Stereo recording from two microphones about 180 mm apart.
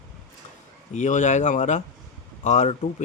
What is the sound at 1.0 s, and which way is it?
Speech, 40° left (ahead or behind).